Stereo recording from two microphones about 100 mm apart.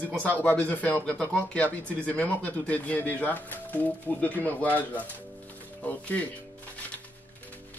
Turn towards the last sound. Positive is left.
turn(degrees=15)  # may be behind; listen again after turning